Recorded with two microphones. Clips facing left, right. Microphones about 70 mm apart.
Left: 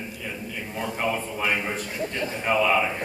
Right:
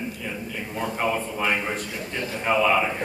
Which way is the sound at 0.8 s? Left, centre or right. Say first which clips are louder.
Right 2 dB; centre.